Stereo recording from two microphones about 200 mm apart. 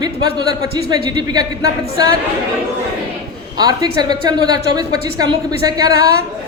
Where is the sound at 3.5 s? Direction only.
20° right (ahead or behind).